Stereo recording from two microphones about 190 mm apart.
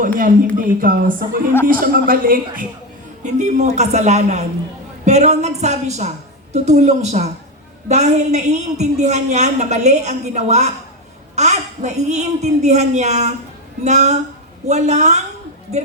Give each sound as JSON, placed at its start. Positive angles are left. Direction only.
{"t": 0.2, "sound": "a woman's voice", "side_deg": -45}
{"t": 3.2, "sound": "a woman's voice", "side_deg": -40}